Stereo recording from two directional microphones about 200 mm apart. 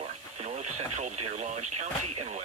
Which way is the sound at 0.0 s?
35° right (ahead or behind).